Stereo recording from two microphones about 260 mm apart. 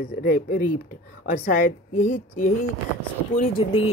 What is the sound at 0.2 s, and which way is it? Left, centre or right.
Speech, left.